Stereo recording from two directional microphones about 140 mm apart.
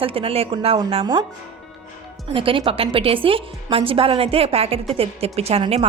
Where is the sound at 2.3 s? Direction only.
40° right (ahead or behind).